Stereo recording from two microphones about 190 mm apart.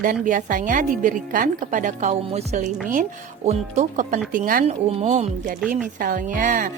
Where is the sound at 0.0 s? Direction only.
45° right (ahead or behind).